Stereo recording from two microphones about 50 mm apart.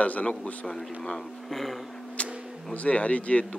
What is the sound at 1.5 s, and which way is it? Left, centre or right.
Speech, centre.